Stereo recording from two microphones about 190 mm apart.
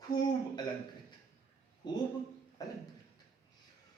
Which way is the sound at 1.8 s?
25° left (ahead or behind).